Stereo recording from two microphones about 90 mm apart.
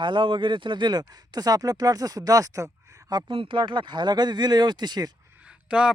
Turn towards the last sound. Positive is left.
turn(degrees=-10)  # may be behind; listen again after turning